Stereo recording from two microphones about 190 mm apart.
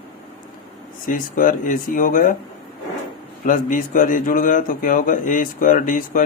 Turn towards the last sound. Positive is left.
turn(degrees=45)  # may be behind; listen again after turning